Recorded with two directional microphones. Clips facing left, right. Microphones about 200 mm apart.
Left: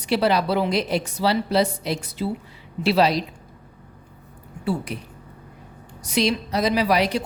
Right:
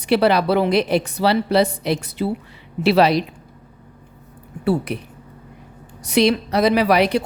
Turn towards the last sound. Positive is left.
turn(degrees=-60)  # may be behind; listen again after turning